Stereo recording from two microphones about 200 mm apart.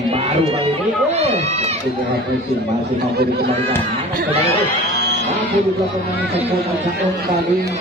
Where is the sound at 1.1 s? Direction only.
30° right (ahead or behind).